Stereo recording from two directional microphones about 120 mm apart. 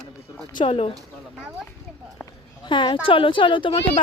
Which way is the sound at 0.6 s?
55° left (ahead or behind).